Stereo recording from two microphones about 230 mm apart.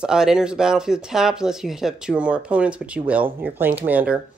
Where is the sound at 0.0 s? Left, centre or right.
Centre.